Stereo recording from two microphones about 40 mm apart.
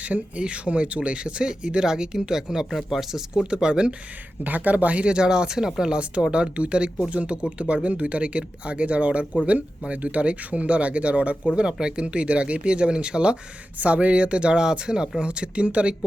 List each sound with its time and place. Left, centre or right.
0.0 s speech: right; by 2.6 s centre
2.6 s speech: centre
3.4 s speech: right
4.4 s speech: right; by 6.0 s centre
6.0 s speech: right